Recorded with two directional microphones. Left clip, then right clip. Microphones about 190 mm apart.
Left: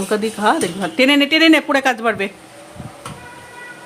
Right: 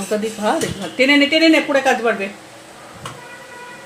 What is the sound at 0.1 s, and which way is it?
Speech, 25° left (ahead or behind).